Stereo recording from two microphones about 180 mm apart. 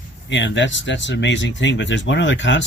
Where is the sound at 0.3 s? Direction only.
85° left.